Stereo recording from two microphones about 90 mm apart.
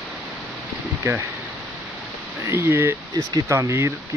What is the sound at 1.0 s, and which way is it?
Speech, 30° right (ahead or behind).